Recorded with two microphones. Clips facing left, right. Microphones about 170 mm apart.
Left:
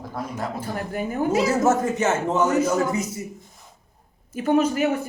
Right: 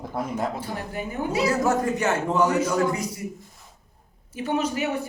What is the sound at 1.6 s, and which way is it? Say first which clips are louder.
Speech: left 2 dB; 20° left (ahead or behind).